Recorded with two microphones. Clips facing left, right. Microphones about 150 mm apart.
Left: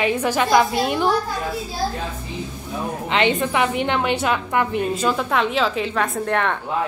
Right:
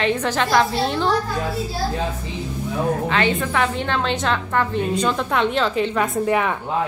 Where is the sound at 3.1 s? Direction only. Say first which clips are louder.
Left 1 dB; 20° left (ahead or behind); by 6.6 s 5° right (ahead or behind).